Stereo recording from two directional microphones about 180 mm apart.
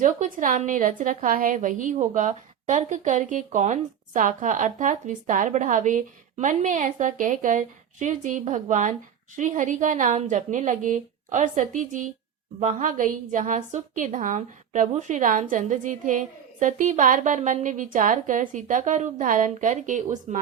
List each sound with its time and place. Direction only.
0.0 s a woman's voice: 45° right (ahead or behind)